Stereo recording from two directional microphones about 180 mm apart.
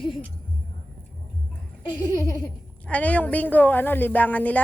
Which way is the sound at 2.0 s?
20° left (ahead or behind).